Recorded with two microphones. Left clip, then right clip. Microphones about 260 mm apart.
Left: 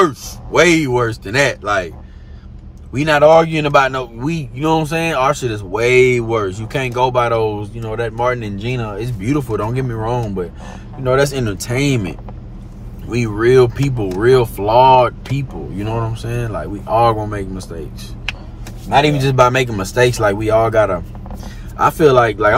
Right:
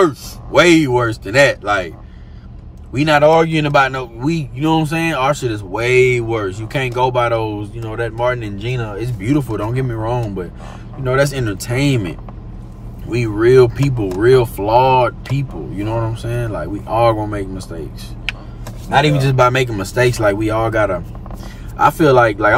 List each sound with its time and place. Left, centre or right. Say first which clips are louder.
0.0 s speech: even; centre
18.9 s speech: left 1 dB; centre